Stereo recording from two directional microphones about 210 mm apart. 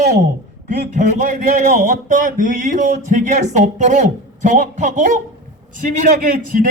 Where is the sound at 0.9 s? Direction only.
35° right (ahead or behind).